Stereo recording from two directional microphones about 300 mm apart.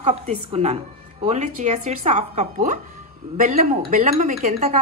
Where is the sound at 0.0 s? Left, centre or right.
Right.